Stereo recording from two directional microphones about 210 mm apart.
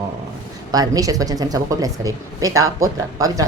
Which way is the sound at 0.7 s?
15° right (ahead or behind).